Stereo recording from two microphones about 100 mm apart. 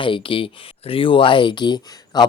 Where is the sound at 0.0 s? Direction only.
60° left (ahead or behind).